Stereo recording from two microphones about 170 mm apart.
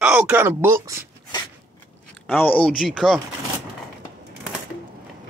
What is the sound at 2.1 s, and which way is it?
Speech, 10° left (ahead or behind).